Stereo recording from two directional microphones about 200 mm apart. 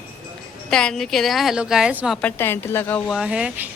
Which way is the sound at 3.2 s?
5° right (ahead or behind).